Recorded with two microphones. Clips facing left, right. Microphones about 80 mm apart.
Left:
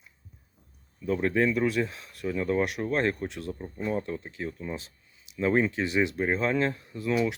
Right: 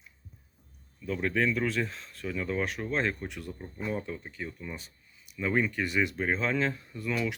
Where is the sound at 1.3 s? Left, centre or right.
Centre.